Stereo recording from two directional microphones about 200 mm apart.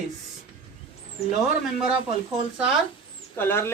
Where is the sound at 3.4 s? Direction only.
10° left (ahead or behind).